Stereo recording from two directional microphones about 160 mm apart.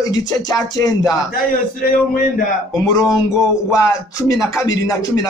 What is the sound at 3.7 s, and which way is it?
Music, 20° left (ahead or behind).